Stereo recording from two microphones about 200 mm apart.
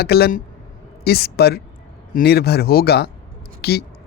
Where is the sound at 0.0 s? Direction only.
50° left (ahead or behind).